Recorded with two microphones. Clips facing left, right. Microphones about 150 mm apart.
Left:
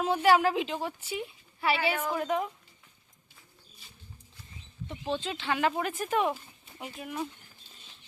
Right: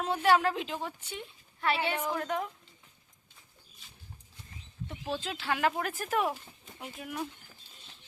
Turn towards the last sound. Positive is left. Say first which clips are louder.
# left 2 dB
turn(degrees=5)  # may be behind; listen again after turning